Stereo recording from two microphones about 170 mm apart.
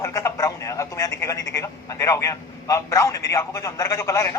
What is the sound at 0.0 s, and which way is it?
A man's voice, 20° left (ahead or behind).